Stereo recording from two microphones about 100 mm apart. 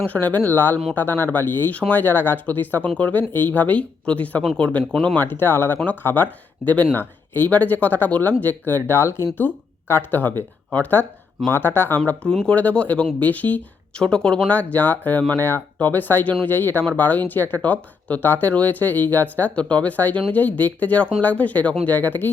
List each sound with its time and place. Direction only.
0.0 s speech: 20° left (ahead or behind)